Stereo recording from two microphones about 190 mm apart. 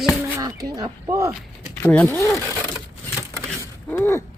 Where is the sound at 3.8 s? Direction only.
10° left (ahead or behind).